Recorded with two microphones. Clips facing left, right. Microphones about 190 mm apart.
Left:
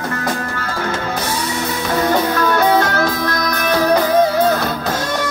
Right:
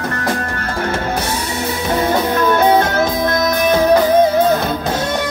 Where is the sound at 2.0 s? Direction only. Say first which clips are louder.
Even; 20° right (ahead or behind).